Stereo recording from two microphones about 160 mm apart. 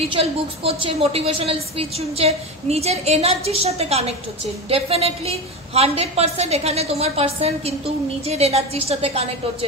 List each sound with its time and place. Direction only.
0.1 s a woman's voice: 35° right (ahead or behind)